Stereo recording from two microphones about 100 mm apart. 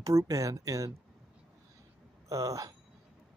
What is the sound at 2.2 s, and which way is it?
Speech, 35° right (ahead or behind).